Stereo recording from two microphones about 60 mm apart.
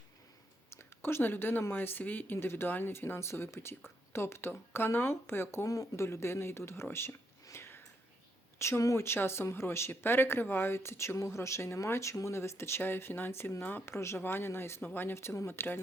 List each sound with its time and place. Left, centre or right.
0.7 s a sound: left
1.7 s speech: left
5.6 s speech: left
7.4 s a sound: left
8.5 s speech: left
13.8 s speech: left
14.8 s speech: left